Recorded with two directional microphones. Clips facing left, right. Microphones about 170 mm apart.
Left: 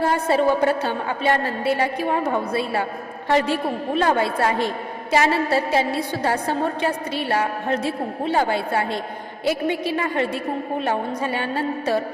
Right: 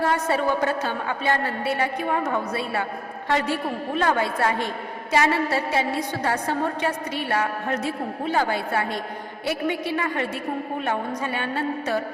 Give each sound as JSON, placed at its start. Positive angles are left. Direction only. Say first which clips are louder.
{"t": 0.0, "sound": "a woman's voice", "louder": "left 4 dB", "side_deg": 30}